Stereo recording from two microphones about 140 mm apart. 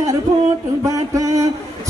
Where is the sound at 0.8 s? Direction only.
25° right (ahead or behind).